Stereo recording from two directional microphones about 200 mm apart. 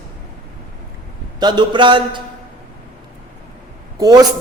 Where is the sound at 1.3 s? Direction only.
20° right (ahead or behind).